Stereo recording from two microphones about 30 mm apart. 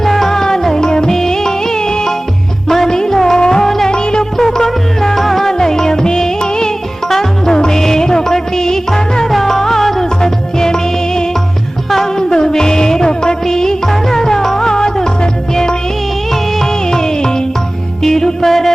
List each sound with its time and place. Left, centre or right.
0.0 s music: centre
2.6 s music: centre
2.9 s music: left
3.9 s music: left
4.4 s music: centre
5.5 s music: centre
11.9 s music: centre
12.3 s music: left
16.9 s music: centre